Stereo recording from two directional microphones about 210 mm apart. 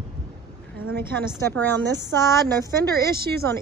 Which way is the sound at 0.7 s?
45° right (ahead or behind).